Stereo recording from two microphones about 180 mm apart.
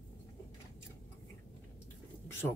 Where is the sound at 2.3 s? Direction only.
15° left (ahead or behind).